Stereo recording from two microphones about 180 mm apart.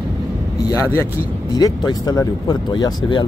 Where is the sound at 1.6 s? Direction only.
20° left (ahead or behind).